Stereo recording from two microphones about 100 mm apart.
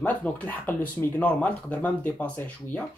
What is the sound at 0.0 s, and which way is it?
Speech, 15° left (ahead or behind).